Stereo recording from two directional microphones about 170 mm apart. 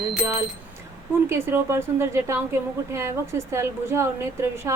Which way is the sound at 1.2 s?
15° right (ahead or behind).